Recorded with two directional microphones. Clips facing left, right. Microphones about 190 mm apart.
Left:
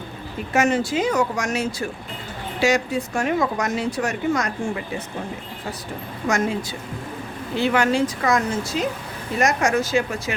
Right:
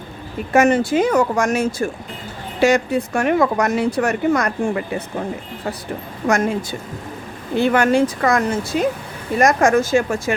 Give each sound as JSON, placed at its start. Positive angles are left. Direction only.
{"t": 0.5, "sound": "speech", "side_deg": -55}
{"t": 6.2, "sound": "speech", "side_deg": -55}